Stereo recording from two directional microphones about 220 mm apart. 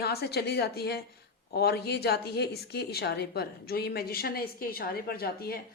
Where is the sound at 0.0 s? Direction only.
45° left (ahead or behind).